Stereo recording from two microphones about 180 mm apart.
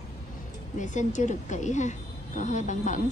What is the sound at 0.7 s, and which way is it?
A woman's voice, 45° left (ahead or behind).